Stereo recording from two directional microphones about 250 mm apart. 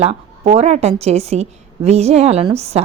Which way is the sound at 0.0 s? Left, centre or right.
Right.